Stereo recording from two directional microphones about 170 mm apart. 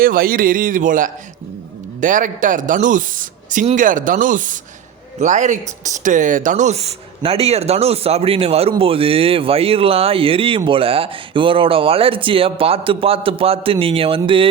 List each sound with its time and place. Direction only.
0.0 s a man's voice: 60° right (ahead or behind); by 14.4 s 30° right (ahead or behind)